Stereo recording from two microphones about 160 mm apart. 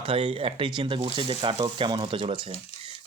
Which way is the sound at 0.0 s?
35° right (ahead or behind).